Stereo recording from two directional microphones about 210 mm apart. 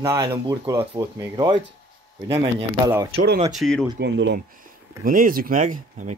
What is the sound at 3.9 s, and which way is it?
Speech, 55° right (ahead or behind).